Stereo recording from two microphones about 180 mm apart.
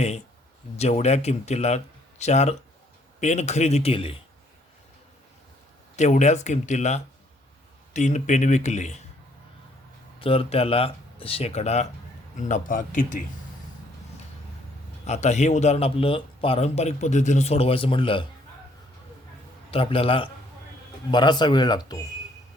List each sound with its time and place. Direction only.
0.8 s a man's voice: 40° left (ahead or behind)
6.0 s a man's voice: 40° left (ahead or behind)
10.2 s a man's voice: 30° left (ahead or behind)
15.0 s a man's voice: 40° left (ahead or behind)
19.7 s a man's voice: 30° left (ahead or behind)